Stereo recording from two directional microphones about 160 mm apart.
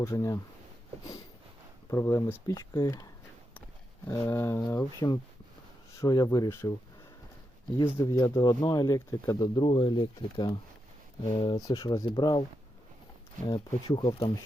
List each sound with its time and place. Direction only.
0.0 s speech: 20° left (ahead or behind)
1.9 s speech: 15° left (ahead or behind)
7.9 s speech: 15° left (ahead or behind)
13.8 s speech: 35° left (ahead or behind)